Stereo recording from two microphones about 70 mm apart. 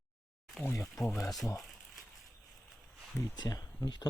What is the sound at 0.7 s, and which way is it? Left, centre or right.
Speech, left.